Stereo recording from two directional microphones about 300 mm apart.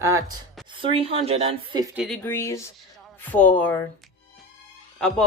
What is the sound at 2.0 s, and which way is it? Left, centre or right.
Speech, centre.